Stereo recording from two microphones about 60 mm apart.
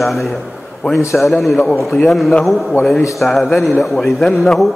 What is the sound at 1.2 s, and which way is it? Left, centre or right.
A man's voice, centre.